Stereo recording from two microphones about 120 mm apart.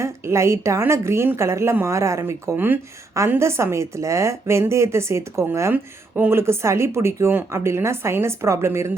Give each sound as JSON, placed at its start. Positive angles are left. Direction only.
{"t": 0.0, "sound": "a woman's voice", "side_deg": -25}